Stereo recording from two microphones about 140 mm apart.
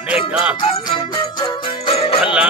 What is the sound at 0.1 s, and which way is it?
Music, 5° right (ahead or behind).